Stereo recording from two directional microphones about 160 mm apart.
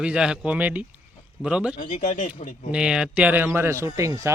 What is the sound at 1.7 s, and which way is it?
Speech, 55° left (ahead or behind).